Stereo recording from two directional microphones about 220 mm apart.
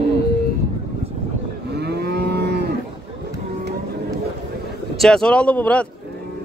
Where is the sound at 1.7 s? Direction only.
50° right (ahead or behind).